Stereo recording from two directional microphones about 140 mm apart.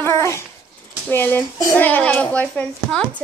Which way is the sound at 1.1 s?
15° left (ahead or behind).